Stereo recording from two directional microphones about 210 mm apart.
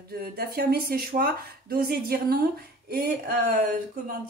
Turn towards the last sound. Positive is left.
turn(degrees=-40)  # may be behind; listen again after turning